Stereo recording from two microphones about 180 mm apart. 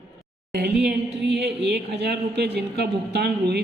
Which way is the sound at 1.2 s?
70° right (ahead or behind).